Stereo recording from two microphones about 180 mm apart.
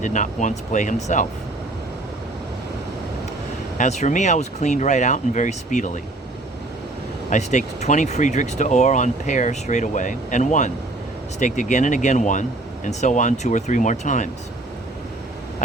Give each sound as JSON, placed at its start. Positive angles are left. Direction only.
{"t": 0.0, "sound": "speech", "side_deg": 45}
{"t": 3.8, "sound": "speech", "side_deg": 40}
{"t": 7.3, "sound": "speech", "side_deg": 40}